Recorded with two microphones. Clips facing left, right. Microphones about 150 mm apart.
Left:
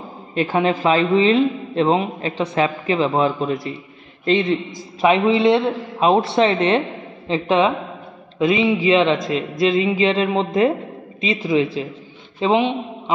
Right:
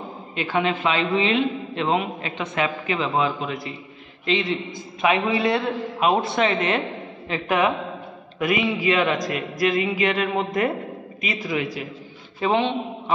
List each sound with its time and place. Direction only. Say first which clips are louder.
0.3 s a man's voice: left 5 dB; 40° left (ahead or behind)
5.0 s a man's voice: left 6 dB; 25° left (ahead or behind)